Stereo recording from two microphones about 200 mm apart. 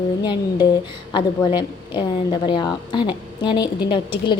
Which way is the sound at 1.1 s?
20° left (ahead or behind).